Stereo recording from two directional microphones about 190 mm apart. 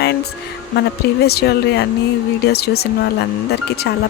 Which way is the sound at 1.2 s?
60° left (ahead or behind).